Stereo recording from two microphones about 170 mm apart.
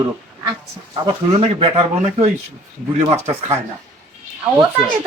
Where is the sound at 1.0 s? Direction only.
30° right (ahead or behind).